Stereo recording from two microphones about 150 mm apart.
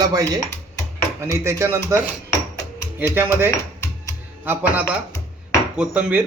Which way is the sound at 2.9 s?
15° right (ahead or behind).